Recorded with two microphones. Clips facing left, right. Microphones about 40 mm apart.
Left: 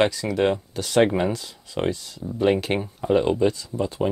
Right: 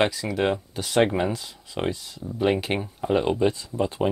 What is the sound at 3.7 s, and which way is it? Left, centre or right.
Speech, centre.